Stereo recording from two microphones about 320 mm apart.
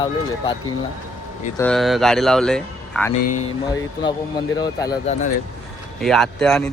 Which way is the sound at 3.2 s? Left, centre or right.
Left.